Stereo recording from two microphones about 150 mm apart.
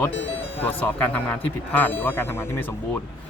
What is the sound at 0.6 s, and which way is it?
Speech, 10° left (ahead or behind).